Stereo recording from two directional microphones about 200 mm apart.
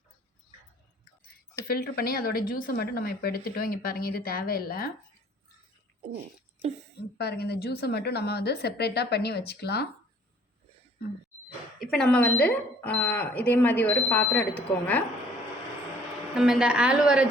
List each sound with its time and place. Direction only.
1.7 s speech: 50° left (ahead or behind)
7.2 s a woman's voice: 55° left (ahead or behind)
11.8 s speech: centre (ahead or behind)
16.3 s a woman's voice: centre (ahead or behind)